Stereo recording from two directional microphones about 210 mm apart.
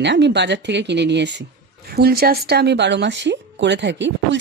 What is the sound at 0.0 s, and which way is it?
A woman's voice, 55° right (ahead or behind).